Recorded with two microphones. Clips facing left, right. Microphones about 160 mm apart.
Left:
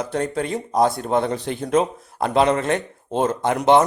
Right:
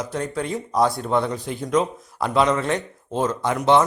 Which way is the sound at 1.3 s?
75° left (ahead or behind).